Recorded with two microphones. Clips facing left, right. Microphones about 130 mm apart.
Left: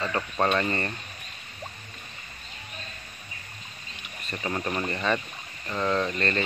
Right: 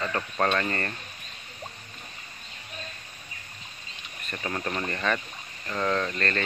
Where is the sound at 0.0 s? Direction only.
10° left (ahead or behind).